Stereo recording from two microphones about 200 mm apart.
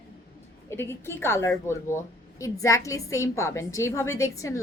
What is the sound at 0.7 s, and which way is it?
A woman's voice, 10° left (ahead or behind).